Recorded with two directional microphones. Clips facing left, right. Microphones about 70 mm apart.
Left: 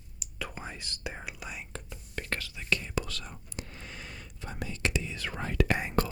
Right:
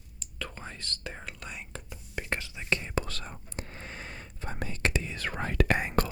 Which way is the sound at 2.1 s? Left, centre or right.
Centre.